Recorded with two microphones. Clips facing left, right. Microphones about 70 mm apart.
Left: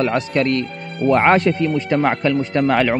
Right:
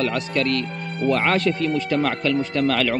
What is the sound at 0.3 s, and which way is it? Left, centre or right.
Speech, left.